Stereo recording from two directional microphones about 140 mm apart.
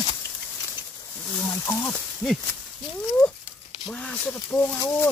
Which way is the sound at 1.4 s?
15° left (ahead or behind).